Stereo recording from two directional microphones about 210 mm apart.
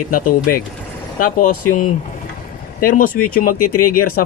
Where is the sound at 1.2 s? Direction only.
40° left (ahead or behind).